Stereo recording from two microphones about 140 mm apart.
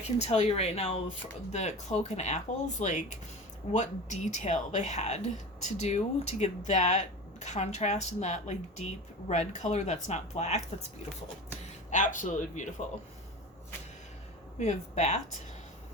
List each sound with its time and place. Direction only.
0.2 s speech: 50° left (ahead or behind)
11.9 s speech: 65° left (ahead or behind)
14.6 s speech: 55° left (ahead or behind)